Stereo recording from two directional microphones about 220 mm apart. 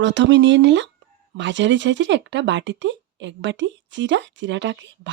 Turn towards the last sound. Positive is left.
turn(degrees=-55)  # may be behind; listen again after turning